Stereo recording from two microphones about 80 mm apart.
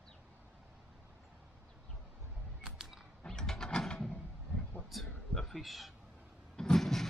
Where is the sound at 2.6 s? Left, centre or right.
Centre.